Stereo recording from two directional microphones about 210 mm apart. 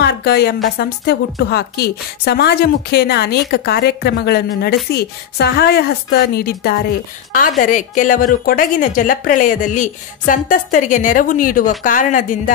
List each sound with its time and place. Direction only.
0.0 s a woman's voice: 50° left (ahead or behind)